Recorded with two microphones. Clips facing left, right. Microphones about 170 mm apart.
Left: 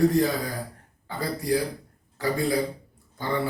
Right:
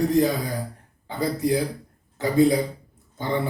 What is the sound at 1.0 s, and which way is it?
A man's voice, 20° right (ahead or behind).